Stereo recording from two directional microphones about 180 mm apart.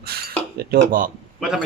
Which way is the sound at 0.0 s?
60° right (ahead or behind).